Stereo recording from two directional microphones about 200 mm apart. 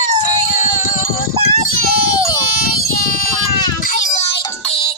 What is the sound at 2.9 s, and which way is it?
Child singing, 45° left (ahead or behind).